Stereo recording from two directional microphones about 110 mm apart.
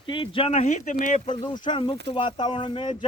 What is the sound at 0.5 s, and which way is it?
Speech, 90° left.